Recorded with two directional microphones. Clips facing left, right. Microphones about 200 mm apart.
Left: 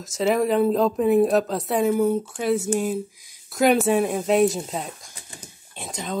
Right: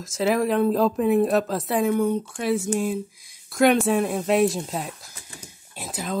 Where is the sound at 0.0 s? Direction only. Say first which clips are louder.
Left 1 dB; centre (ahead or behind).